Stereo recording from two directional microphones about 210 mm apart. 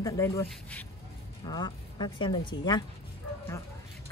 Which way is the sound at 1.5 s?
20° left (ahead or behind).